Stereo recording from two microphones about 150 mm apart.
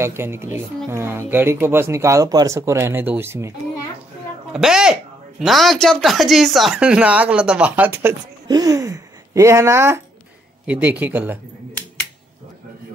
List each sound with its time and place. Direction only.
0.0 s speech: 15° right (ahead or behind)
4.5 s a man's voice: 5° right (ahead or behind)